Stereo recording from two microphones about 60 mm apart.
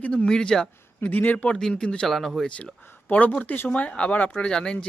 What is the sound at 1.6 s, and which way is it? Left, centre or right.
Speech, centre.